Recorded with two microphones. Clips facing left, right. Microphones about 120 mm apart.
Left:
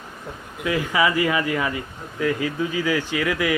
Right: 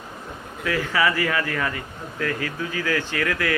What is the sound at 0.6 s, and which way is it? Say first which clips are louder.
Speech: left 2 dB; 15° left (ahead or behind).